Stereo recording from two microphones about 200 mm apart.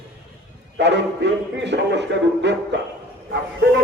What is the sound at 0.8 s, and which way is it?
Speech, 60° right (ahead or behind).